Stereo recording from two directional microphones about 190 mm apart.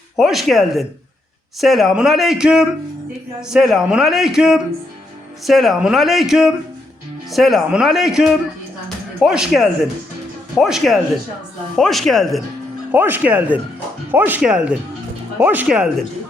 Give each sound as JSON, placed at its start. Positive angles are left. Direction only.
{"t": 0.2, "sound": "a man's voice", "side_deg": 0}
{"t": 12.9, "sound": "a man's voice", "side_deg": -10}